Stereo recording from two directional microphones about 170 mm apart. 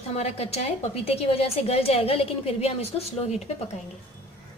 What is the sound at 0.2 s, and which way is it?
A woman's voice, 40° left (ahead or behind).